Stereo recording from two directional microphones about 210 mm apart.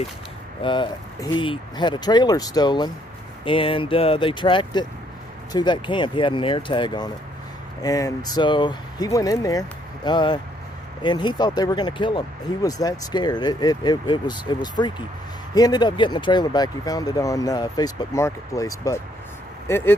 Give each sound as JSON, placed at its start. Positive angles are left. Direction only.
{"t": 0.6, "sound": "speech", "side_deg": 20}